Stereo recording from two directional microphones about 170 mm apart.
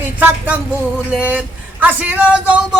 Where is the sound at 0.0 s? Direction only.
10° right (ahead or behind).